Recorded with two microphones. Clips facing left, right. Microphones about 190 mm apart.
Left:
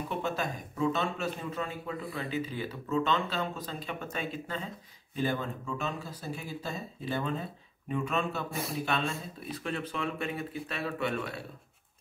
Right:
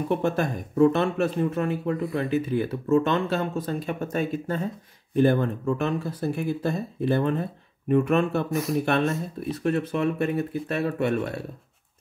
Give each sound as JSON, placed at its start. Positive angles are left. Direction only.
{"t": 0.1, "sound": "speech", "side_deg": -55}
{"t": 5.1, "sound": "speech", "side_deg": -60}
{"t": 8.5, "sound": "speech", "side_deg": 30}
{"t": 8.7, "sound": "speech", "side_deg": -60}